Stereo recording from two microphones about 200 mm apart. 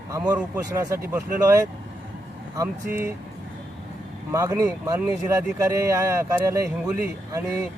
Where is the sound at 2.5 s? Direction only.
15° right (ahead or behind).